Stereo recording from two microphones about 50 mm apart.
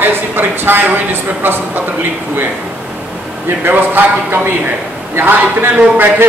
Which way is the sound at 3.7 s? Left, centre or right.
Right.